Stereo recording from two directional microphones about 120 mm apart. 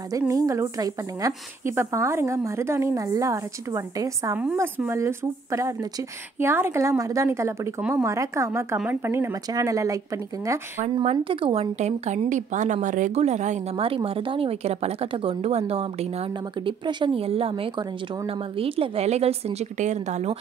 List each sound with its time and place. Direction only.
0.3 s a woman's voice: 30° right (ahead or behind)
11.1 s a woman's voice: 50° right (ahead or behind)
11.8 s a woman's voice: 75° right (ahead or behind)
13.7 s a woman's voice: 50° right (ahead or behind); by 20.3 s 75° right (ahead or behind)